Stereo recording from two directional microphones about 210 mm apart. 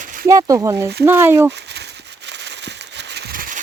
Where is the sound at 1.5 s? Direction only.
55° right (ahead or behind).